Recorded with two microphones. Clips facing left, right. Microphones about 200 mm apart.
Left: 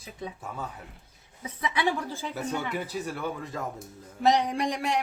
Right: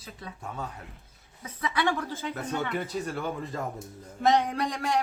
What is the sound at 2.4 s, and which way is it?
A woman's voice, 10° left (ahead or behind).